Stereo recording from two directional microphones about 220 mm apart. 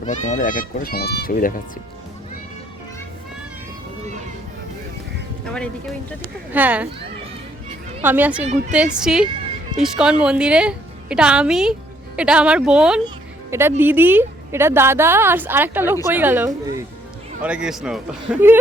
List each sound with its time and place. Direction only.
0.0 s speech: 35° left (ahead or behind)
5.5 s a man's voice: 5° left (ahead or behind)
6.5 s a woman's voice: 5° right (ahead or behind)
8.0 s a woman's voice: 10° right (ahead or behind)